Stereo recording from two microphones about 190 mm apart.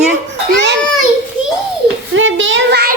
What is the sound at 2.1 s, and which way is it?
Child singing, 90° right.